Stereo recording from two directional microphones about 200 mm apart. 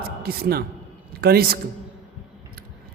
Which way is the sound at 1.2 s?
50° right (ahead or behind).